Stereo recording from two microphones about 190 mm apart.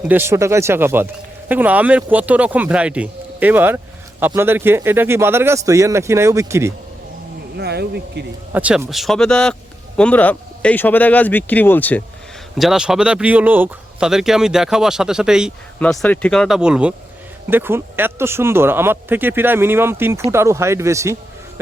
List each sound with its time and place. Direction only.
0.1 s speech: 15° right (ahead or behind)
7.5 s speech: 60° right (ahead or behind)
8.5 s speech: 10° right (ahead or behind); by 12.0 s 10° left (ahead or behind)
12.5 s speech: centre (ahead or behind)